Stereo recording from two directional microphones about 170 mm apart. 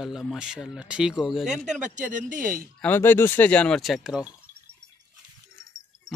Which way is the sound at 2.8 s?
10° left (ahead or behind).